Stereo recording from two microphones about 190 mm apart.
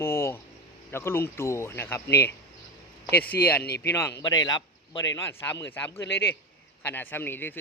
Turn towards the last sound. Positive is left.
turn(degrees=10)  # may be behind; listen again after turning